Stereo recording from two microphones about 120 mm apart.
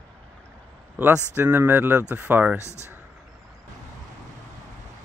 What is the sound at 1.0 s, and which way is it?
Speech, 20° right (ahead or behind).